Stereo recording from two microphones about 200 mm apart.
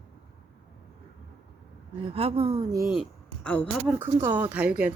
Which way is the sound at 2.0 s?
30° right (ahead or behind).